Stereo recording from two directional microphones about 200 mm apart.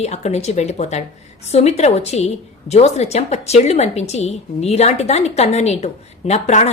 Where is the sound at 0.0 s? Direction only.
35° left (ahead or behind).